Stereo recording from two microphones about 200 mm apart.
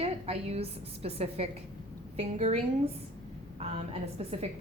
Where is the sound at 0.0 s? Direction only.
30° right (ahead or behind).